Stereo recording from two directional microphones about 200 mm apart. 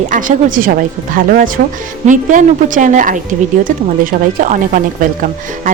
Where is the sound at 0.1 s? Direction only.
40° right (ahead or behind).